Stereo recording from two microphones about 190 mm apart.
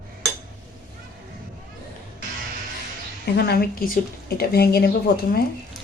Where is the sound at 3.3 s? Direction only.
55° left (ahead or behind).